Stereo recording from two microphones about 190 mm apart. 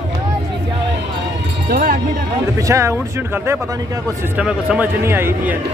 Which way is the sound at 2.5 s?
15° right (ahead or behind).